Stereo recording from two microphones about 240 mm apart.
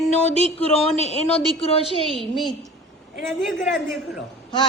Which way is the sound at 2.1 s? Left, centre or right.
Centre.